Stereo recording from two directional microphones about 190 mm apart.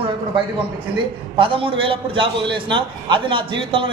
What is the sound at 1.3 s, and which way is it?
A man's voice, 30° right (ahead or behind).